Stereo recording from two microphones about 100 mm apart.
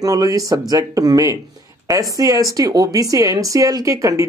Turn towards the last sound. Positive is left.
turn(degrees=-35)  # may be behind; listen again after turning